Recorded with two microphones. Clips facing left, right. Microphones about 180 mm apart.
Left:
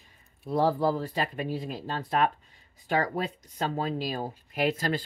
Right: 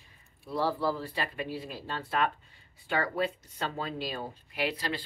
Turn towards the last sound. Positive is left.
turn(degrees=45)  # may be behind; listen again after turning